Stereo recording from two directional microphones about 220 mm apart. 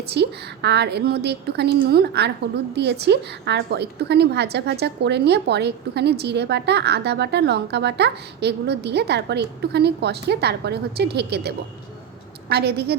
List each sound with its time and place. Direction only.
0.1 s a woman's voice: 50° right (ahead or behind)